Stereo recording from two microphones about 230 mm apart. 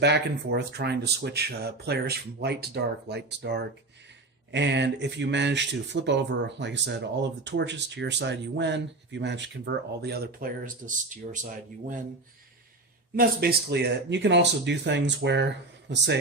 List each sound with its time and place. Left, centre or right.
0.0 s speech: right
13.1 s speech: right